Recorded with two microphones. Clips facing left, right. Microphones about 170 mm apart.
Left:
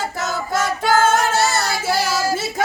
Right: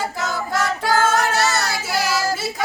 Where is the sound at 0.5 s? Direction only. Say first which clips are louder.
Left 3 dB; 25° left (ahead or behind).